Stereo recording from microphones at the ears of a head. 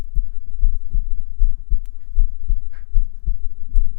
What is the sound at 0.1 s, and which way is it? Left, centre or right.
Heart sounds, left.